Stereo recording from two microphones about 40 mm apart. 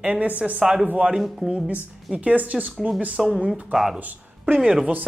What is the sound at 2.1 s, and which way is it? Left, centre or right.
Speech, right.